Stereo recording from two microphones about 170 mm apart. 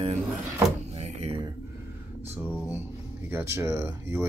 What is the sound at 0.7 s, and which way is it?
Door, 40° right (ahead or behind).